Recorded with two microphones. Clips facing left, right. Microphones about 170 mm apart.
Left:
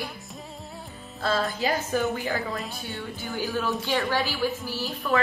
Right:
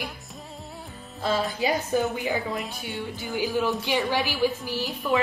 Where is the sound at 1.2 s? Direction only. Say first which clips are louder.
Right 1 dB; 15° right (ahead or behind).